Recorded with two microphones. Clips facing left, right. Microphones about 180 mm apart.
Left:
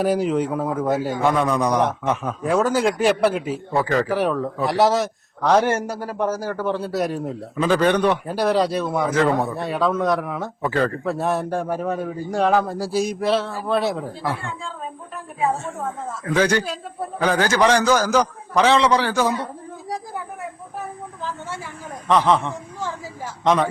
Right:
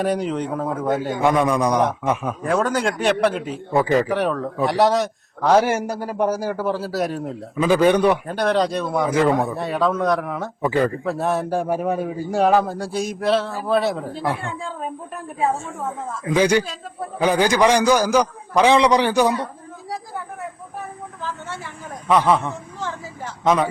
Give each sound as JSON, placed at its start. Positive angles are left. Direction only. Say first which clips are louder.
{"t": 0.0, "sound": "speech", "louder": "left 2 dB", "side_deg": 5}
{"t": 1.2, "sound": "a man's voice", "louder": "right 3 dB", "side_deg": -15}
{"t": 2.4, "sound": "a man's voice", "louder": "left 3 dB", "side_deg": 5}
{"t": 3.7, "sound": "a man's voice", "louder": "right 3 dB", "side_deg": -15}
{"t": 4.0, "sound": "a man's voice", "louder": "even", "side_deg": 0}
{"t": 8.3, "sound": "a man's voice", "louder": "even", "side_deg": 5}
{"t": 10.6, "sound": "a man's voice", "louder": "right 2 dB", "side_deg": -10}
{"t": 11.0, "sound": "a man's voice", "louder": "even", "side_deg": 0}
{"t": 14.4, "sound": "speech", "louder": "right 3 dB", "side_deg": -60}
{"t": 16.2, "sound": "a man's voice", "louder": "right 2 dB", "side_deg": -15}
{"t": 22.3, "sound": "a man's voice", "louder": "even", "side_deg": -10}